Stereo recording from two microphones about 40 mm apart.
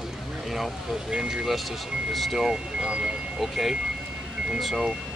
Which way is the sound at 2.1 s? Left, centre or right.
Centre.